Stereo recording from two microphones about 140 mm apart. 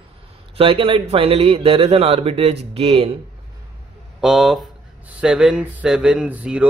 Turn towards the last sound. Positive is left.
turn(degrees=-10)  # may be behind; listen again after turning